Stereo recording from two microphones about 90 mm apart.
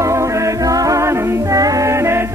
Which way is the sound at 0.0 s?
35° right (ahead or behind).